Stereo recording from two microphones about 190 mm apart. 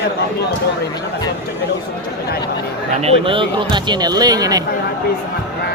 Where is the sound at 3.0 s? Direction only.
30° right (ahead or behind).